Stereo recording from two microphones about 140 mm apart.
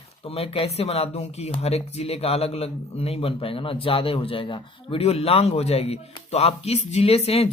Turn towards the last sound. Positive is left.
turn(degrees=45)  # may be behind; listen again after turning